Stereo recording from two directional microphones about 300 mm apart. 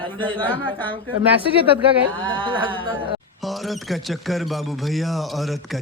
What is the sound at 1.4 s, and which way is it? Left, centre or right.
Speech, centre.